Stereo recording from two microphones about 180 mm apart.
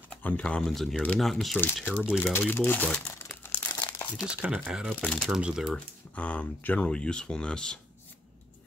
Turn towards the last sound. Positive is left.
turn(degrees=5)  # may be behind; listen again after turning